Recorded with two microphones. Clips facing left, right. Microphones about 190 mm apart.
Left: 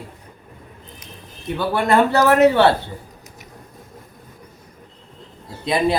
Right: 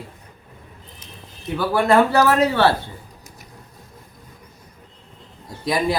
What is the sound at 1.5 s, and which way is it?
A man's voice, 25° left (ahead or behind).